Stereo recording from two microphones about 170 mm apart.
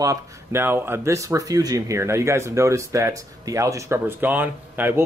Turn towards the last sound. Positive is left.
turn(degrees=-10)  # may be behind; listen again after turning